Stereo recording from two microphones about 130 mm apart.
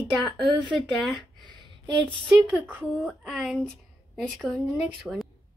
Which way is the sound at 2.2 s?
5° right (ahead or behind).